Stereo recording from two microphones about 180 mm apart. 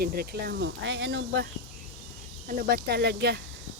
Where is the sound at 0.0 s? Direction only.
55° right (ahead or behind); by 1.5 s 80° right.